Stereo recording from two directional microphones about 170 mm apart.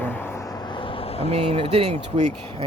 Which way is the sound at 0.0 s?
10° left (ahead or behind).